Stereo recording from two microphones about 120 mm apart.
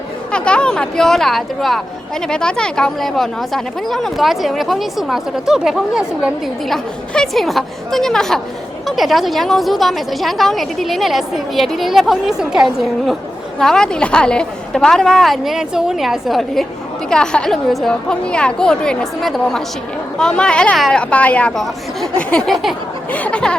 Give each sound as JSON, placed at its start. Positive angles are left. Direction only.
{"t": 0.3, "sound": "a woman's voice", "side_deg": 10}